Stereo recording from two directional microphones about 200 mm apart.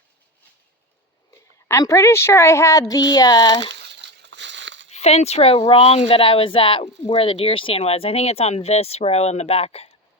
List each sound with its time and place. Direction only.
1.6 s a woman's voice: 15° left (ahead or behind)
3.7 s a sound: 60° right (ahead or behind)
4.9 s speech: 30° left (ahead or behind)